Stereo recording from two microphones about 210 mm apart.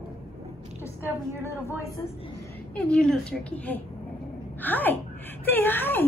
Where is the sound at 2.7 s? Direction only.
5° left (ahead or behind).